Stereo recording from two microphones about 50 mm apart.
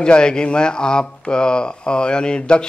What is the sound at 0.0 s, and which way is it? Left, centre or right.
Speech, centre.